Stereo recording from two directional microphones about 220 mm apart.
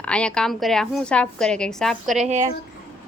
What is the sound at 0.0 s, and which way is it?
A woman's voice, 5° left (ahead or behind).